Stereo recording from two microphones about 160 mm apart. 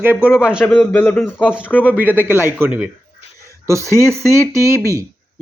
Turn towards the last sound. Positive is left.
turn(degrees=-20)  # may be behind; listen again after turning